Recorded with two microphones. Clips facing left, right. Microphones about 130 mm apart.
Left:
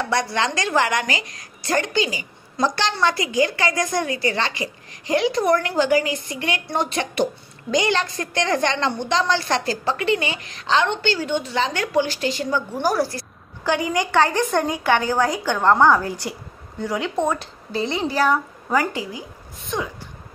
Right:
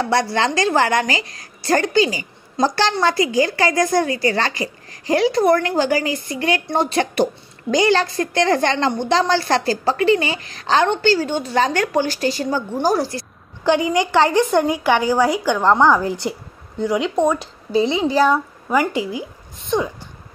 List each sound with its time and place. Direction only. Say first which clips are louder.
0.0 s a woman's voice: right 4 dB; 30° right (ahead or behind)
12.8 s a woman's voice: right 3 dB; 25° right (ahead or behind)